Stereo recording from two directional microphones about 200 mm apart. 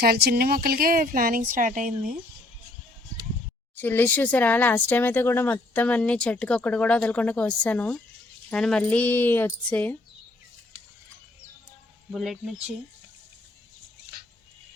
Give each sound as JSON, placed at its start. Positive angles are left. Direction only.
{"t": 0.0, "sound": "speech", "side_deg": -50}
{"t": 3.8, "sound": "speech", "side_deg": 10}
{"t": 12.1, "sound": "speech", "side_deg": 0}